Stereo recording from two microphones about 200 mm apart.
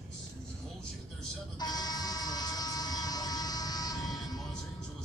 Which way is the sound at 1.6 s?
20° left (ahead or behind).